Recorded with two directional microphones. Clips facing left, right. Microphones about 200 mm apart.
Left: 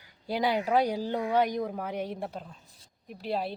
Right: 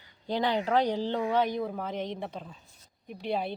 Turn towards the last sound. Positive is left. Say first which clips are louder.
# right 1 dB
turn(degrees=0)  # may be behind; listen again after turning